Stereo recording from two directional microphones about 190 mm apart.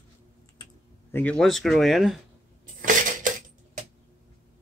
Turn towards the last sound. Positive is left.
turn(degrees=-40)  # may be behind; listen again after turning